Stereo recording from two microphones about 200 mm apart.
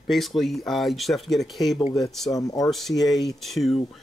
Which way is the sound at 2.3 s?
20° left (ahead or behind).